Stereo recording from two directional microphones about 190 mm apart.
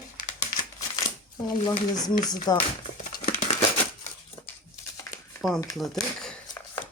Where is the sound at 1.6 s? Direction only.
25° left (ahead or behind).